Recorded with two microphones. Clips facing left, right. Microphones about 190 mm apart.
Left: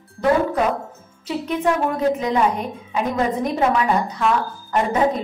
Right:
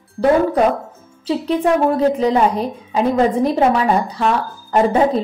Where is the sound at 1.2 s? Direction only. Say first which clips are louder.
Right 4 dB; 30° right (ahead or behind).